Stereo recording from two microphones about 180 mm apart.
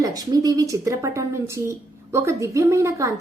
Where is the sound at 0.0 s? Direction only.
20° right (ahead or behind).